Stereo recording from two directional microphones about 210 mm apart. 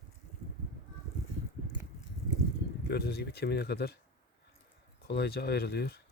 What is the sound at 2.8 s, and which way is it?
Speech, 50° left (ahead or behind).